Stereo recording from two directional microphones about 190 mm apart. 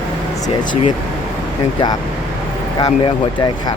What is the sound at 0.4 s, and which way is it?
Speech, 40° left (ahead or behind).